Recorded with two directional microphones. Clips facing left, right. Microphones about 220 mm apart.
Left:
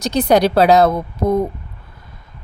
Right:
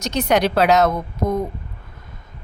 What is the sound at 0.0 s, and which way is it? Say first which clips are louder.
A woman's voice: left 4 dB; 35° left (ahead or behind).